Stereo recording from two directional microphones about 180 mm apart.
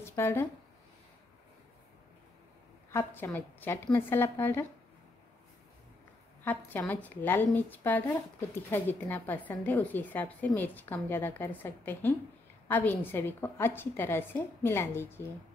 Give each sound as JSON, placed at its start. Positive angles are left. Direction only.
{"t": 0.0, "sound": "speech", "side_deg": 15}
{"t": 2.9, "sound": "speech", "side_deg": 15}
{"t": 6.4, "sound": "speech", "side_deg": 10}